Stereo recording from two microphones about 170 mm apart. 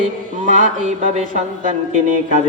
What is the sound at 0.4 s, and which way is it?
Music, 45° right (ahead or behind).